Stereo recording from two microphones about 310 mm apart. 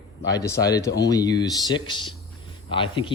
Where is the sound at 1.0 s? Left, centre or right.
Centre.